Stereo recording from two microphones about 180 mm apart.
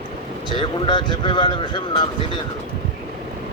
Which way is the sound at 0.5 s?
25° left (ahead or behind).